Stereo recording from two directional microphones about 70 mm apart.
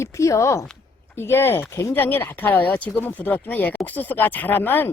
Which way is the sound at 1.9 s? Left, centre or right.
Left.